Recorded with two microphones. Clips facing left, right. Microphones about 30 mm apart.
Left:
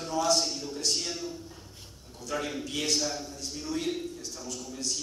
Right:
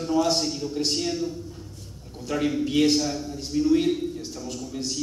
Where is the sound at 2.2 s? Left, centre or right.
Right.